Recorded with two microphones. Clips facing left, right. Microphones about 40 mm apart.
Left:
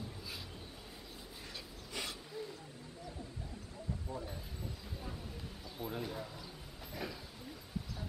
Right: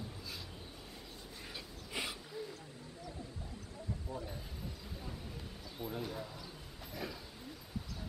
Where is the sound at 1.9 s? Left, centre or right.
Centre.